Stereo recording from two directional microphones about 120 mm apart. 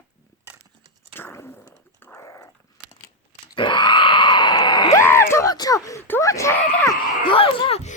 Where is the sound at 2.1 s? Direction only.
25° left (ahead or behind).